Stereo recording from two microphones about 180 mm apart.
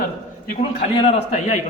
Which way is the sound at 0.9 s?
30° left (ahead or behind).